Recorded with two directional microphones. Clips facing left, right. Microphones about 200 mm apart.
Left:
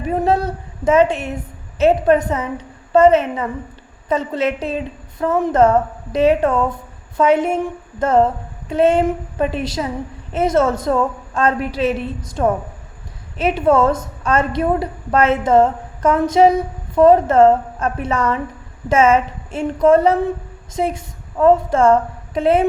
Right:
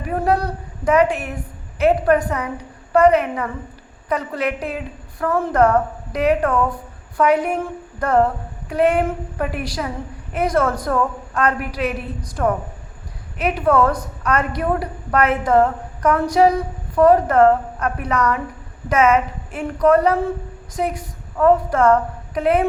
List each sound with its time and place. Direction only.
0.0 s a woman's voice: 25° left (ahead or behind)